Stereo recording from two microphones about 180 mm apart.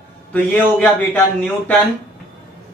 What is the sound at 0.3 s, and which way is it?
A man's voice, 5° left (ahead or behind).